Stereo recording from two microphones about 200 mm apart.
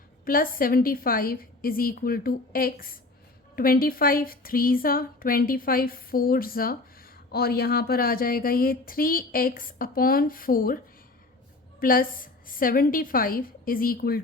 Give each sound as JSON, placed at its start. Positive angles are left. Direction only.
{"t": 0.3, "sound": "a woman's voice", "side_deg": 45}
{"t": 11.8, "sound": "a woman's voice", "side_deg": 45}